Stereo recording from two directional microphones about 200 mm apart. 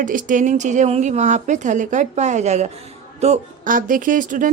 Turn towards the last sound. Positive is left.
turn(degrees=-40)  # may be behind; listen again after turning